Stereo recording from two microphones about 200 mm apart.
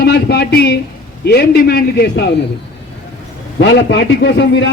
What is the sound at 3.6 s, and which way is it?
A man's voice, 60° left (ahead or behind).